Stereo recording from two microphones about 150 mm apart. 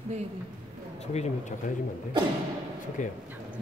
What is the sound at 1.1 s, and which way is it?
Speech, 50° left (ahead or behind).